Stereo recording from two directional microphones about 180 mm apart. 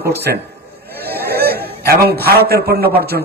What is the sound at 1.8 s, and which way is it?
A man's voice, 60° right (ahead or behind).